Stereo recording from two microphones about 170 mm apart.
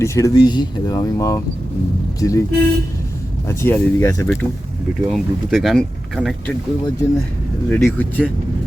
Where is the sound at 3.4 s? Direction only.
15° left (ahead or behind).